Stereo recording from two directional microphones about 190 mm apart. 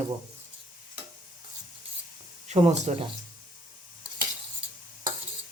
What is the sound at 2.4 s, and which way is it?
Speech, 35° right (ahead or behind).